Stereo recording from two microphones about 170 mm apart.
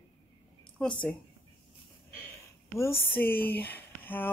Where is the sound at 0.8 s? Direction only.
5° left (ahead or behind).